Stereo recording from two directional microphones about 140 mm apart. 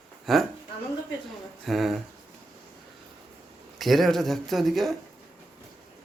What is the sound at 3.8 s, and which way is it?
Speech, centre (ahead or behind).